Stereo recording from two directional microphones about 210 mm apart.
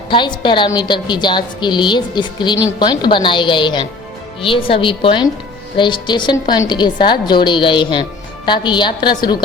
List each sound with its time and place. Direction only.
0.1 s a woman's voice: 20° left (ahead or behind)